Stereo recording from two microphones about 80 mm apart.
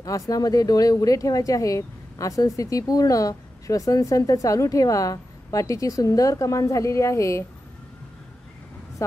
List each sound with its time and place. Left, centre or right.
0.0 s speech: left